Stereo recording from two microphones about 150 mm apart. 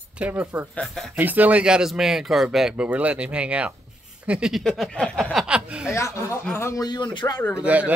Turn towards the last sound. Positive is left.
turn(degrees=-10)  # may be behind; listen again after turning